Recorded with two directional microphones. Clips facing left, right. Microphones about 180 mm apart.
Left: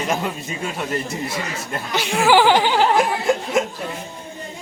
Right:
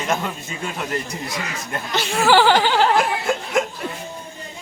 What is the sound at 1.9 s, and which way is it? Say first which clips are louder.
Chuckle: left 1 dB; 10° left (ahead or behind).